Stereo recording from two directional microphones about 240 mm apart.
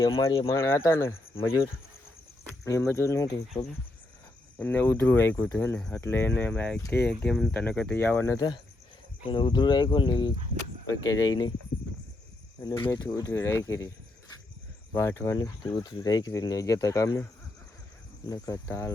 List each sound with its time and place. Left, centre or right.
0.0 s speech: centre
2.6 s speech: centre
4.5 s speech: centre
12.6 s speech: centre
14.9 s speech: centre
18.3 s speech: centre